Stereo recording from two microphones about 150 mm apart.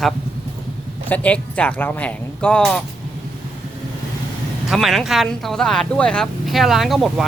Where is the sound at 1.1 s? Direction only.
10° left (ahead or behind).